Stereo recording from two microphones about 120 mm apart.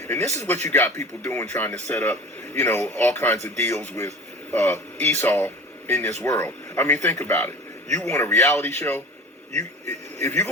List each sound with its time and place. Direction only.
0.1 s speech: 20° left (ahead or behind)